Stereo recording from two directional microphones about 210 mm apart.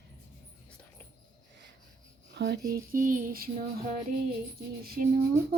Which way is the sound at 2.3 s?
55° right (ahead or behind).